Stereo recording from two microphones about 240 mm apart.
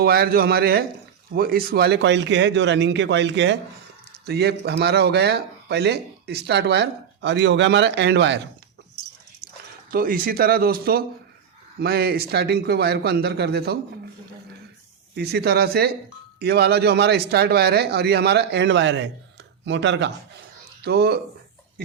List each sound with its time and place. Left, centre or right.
0.0 s a man's voice: right
9.9 s a man's voice: right
15.1 s a man's voice: right